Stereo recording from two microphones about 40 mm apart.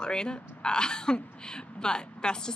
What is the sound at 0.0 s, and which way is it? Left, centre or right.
A woman's voice, left.